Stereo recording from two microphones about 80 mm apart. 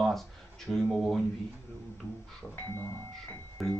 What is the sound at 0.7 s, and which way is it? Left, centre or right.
Speech, centre.